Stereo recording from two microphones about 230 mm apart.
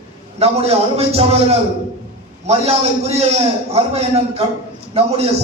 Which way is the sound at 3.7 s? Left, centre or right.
Right.